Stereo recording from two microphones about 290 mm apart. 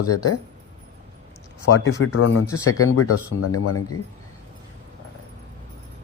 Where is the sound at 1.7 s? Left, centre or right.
Left.